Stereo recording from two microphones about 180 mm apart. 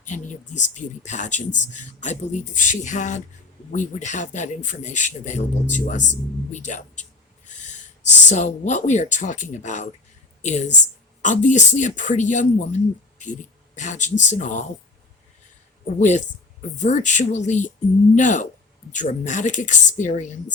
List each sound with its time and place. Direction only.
0.0 s a man's voice: 40° left (ahead or behind)
6.5 s a sound: 40° left (ahead or behind)
8.0 s a man's voice: 40° left (ahead or behind)
16.0 s a man's voice: 40° left (ahead or behind)